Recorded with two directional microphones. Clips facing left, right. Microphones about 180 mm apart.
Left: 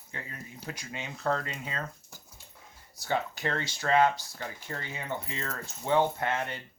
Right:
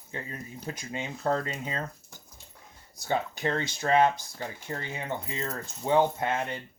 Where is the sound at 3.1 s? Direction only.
20° right (ahead or behind).